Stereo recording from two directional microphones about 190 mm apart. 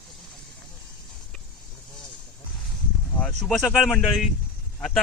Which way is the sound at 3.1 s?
5° left (ahead or behind).